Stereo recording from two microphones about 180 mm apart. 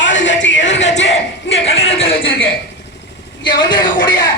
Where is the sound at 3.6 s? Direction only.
25° left (ahead or behind).